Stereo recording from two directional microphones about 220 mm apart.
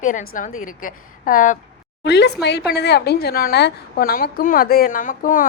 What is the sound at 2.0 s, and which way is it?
A woman's voice, 50° left (ahead or behind).